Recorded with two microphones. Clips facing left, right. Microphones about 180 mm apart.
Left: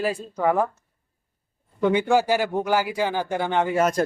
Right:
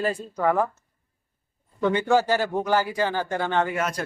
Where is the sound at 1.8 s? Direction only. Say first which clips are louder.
Left 1 dB; 10° left (ahead or behind).